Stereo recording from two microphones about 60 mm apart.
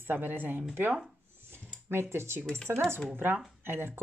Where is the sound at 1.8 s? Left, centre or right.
Right.